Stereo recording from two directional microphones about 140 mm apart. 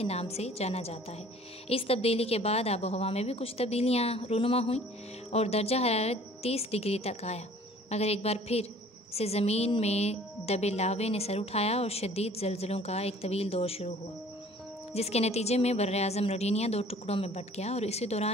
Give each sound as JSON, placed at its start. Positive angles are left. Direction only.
{"t": 0.0, "sound": "a woman's voice", "side_deg": 45}
{"t": 15.0, "sound": "a woman's voice", "side_deg": 50}